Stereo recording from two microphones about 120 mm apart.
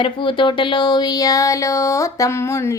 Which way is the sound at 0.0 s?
45° left (ahead or behind).